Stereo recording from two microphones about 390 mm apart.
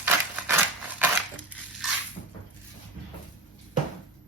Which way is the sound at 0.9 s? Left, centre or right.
Centre.